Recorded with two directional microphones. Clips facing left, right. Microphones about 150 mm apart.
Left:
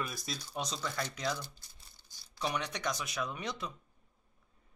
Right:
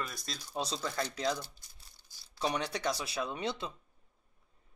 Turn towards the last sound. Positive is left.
turn(degrees=-30)  # may be behind; listen again after turning